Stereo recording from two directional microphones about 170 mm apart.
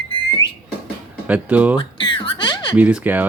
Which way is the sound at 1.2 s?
10° right (ahead or behind).